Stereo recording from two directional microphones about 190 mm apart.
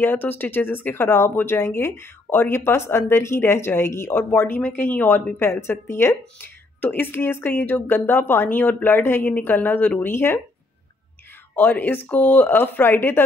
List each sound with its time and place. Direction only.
0.0 s speech: 10° left (ahead or behind)
11.5 s speech: 10° left (ahead or behind)